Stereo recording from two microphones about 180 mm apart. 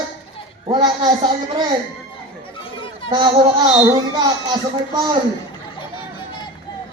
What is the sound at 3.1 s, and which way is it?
Speech, 25° right (ahead or behind).